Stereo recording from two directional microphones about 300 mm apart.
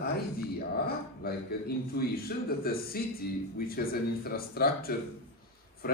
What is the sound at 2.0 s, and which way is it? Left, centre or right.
A man's voice, left.